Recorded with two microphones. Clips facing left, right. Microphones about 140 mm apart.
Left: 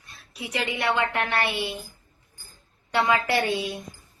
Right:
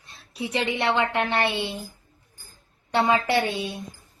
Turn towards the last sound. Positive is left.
turn(degrees=-30)  # may be behind; listen again after turning